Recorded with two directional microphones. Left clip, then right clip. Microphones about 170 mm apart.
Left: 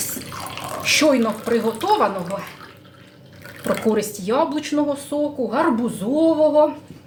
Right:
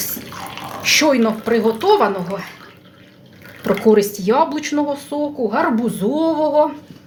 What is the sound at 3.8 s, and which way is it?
A woman's voice, 40° right (ahead or behind).